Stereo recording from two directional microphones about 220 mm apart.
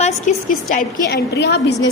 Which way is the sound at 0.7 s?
45° left (ahead or behind).